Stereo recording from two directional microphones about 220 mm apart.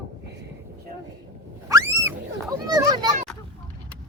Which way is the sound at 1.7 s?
15° right (ahead or behind).